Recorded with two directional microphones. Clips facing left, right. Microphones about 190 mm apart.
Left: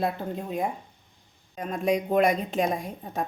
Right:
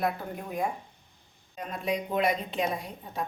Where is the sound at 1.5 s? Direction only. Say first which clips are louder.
Left 6 dB; 45° left (ahead or behind).